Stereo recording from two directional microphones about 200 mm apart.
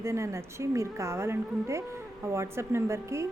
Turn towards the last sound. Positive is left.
turn(degrees=-15)  # may be behind; listen again after turning